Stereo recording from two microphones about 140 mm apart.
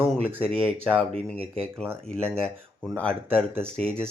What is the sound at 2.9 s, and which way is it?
Speech, 10° left (ahead or behind).